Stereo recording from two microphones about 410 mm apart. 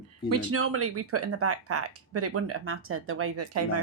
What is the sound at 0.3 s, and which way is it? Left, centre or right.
Speech, right.